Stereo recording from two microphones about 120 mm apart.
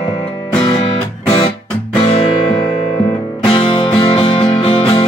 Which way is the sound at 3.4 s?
45° left (ahead or behind).